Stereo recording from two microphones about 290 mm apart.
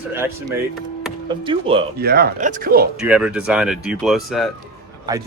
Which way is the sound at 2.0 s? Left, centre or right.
Right.